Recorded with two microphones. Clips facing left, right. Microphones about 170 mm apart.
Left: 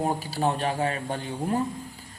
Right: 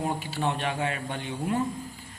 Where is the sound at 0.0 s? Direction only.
40° left (ahead or behind).